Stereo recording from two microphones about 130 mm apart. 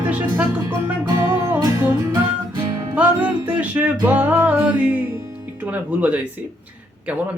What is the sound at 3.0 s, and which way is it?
Music, 10° right (ahead or behind).